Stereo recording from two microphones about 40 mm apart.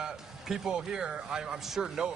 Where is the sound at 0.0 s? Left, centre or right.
Centre.